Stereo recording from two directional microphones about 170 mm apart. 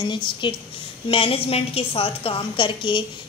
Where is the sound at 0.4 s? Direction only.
25° left (ahead or behind).